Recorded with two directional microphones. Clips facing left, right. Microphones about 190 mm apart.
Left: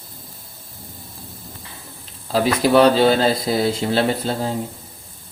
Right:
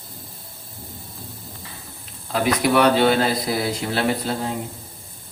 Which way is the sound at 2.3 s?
30° left (ahead or behind).